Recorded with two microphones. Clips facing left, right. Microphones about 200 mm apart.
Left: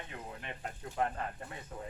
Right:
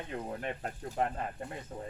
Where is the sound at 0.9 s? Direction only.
30° right (ahead or behind).